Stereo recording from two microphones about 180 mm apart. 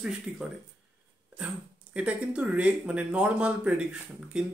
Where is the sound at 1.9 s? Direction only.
5° right (ahead or behind).